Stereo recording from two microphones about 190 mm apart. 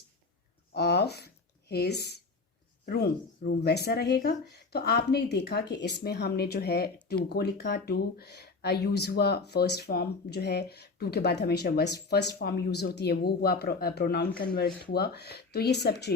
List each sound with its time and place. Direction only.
0.7 s speech: 60° left (ahead or behind)